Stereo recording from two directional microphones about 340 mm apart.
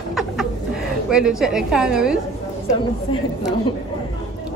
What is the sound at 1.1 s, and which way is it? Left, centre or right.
A woman's voice, centre.